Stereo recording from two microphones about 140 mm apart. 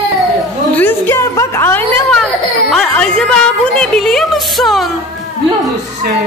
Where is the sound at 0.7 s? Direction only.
15° left (ahead or behind).